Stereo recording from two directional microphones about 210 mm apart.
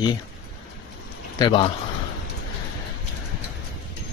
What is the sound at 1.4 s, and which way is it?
Speech, 25° left (ahead or behind).